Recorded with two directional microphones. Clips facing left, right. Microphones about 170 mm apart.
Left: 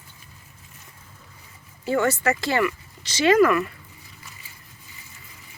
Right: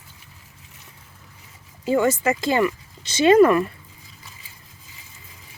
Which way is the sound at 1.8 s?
15° right (ahead or behind).